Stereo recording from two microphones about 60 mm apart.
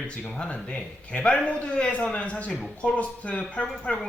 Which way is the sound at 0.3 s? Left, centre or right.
Centre.